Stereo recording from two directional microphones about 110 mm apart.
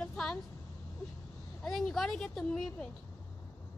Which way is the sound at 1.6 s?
Centre (ahead or behind).